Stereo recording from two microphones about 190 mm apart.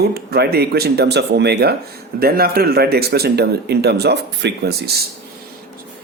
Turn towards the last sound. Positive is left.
turn(degrees=-60)  # may be behind; listen again after turning